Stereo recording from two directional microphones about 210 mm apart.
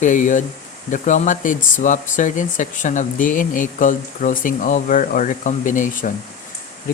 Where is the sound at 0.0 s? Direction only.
40° left (ahead or behind).